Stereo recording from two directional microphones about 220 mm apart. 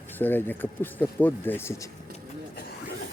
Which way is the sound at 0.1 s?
10° left (ahead or behind).